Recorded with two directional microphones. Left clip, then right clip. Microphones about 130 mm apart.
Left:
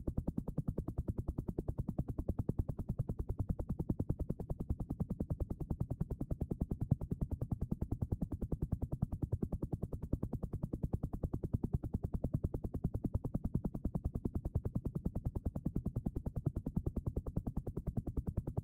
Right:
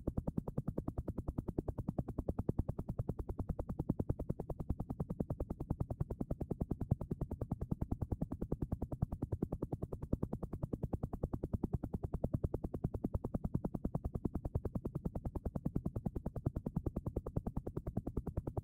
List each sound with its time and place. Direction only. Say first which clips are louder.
0.0 s music: right 1 dB; 30° right (ahead or behind)
3.8 s music: right 1 dB; 35° right (ahead or behind)
5.7 s music: right 1 dB; 35° right (ahead or behind)
11.5 s music: even; 35° right (ahead or behind)